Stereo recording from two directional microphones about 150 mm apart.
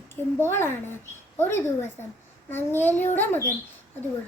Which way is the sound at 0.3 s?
15° left (ahead or behind).